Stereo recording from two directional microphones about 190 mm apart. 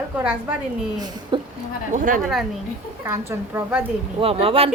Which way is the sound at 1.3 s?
25° right (ahead or behind).